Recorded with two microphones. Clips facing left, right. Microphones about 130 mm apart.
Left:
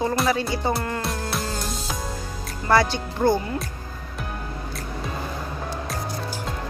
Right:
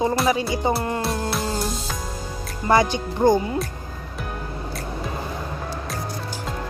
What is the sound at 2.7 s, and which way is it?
Speech, 15° right (ahead or behind).